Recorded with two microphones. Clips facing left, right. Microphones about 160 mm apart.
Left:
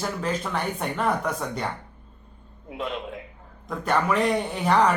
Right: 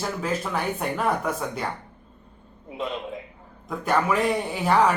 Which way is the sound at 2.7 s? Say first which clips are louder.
Right 1 dB; centre (ahead or behind).